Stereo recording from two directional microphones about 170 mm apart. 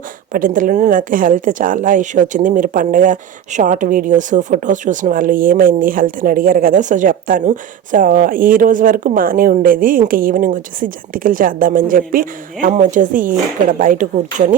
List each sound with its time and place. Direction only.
0.3 s a woman's voice: 50° right (ahead or behind)